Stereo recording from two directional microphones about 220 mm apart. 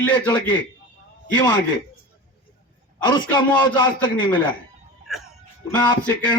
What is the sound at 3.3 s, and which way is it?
A man's voice, 20° left (ahead or behind).